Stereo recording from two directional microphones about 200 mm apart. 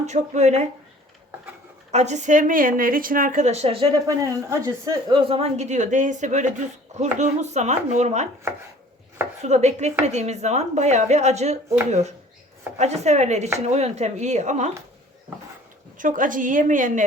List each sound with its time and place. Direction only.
0.0 s a woman's voice: 35° right (ahead or behind)
1.9 s a woman's voice: 35° right (ahead or behind)
9.4 s a woman's voice: 35° right (ahead or behind)
16.0 s a woman's voice: 40° right (ahead or behind)